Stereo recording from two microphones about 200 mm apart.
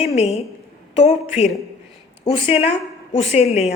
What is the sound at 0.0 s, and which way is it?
A woman's voice, 30° left (ahead or behind).